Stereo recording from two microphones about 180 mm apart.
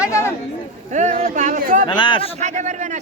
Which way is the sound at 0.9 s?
40° right (ahead or behind).